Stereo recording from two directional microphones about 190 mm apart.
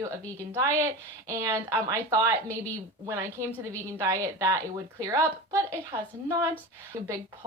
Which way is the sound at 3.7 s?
15° right (ahead or behind).